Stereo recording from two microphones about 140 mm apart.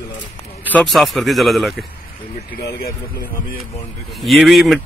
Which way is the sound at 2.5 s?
90° left.